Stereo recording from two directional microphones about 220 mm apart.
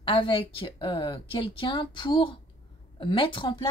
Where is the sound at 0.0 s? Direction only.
25° left (ahead or behind).